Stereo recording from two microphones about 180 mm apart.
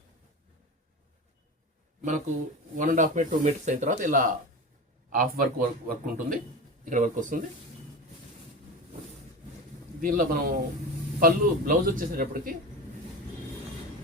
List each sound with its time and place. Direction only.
2.7 s speech: 45° right (ahead or behind)
10.0 s speech: 50° right (ahead or behind)